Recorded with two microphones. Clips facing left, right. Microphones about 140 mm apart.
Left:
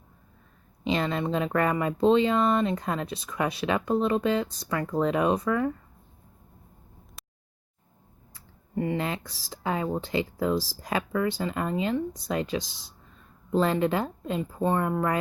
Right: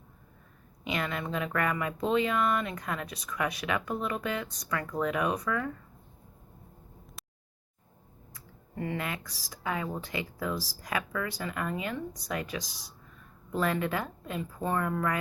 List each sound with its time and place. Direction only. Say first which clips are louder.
0.9 s speech: left 6 dB; 30° left (ahead or behind)
8.3 s speech: left 8 dB; 20° left (ahead or behind)